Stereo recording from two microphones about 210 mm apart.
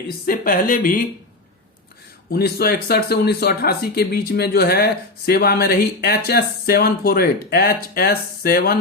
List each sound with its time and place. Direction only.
0.3 s speech: 40° left (ahead or behind)
2.3 s speech: 45° left (ahead or behind)